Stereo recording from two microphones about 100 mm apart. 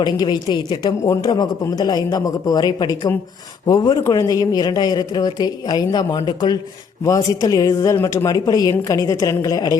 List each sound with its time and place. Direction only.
0.0 s a man's voice: 45° left (ahead or behind)
1.0 s a man's voice: 35° left (ahead or behind)
7.0 s speech: 35° left (ahead or behind)